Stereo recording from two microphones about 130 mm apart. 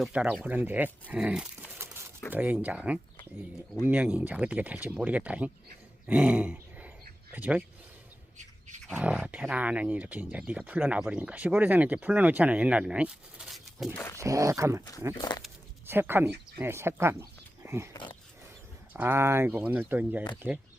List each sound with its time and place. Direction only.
0.0 s speech: 10° right (ahead or behind)
1.8 s a sound: 20° right (ahead or behind)
2.3 s speech: 15° right (ahead or behind)
6.1 s grunt: 10° right (ahead or behind)
7.3 s speech: 10° right (ahead or behind)
8.4 s bird: 70° right (ahead or behind)
8.9 s speech: 10° right (ahead or behind)
13.9 s a sound: 20° left (ahead or behind)
14.2 s speech: 25° right (ahead or behind)
15.2 s speech: 35° left (ahead or behind)
15.9 s speech: 15° right (ahead or behind)
17.9 s a sound: 40° left (ahead or behind)
18.9 s speech: 15° right (ahead or behind)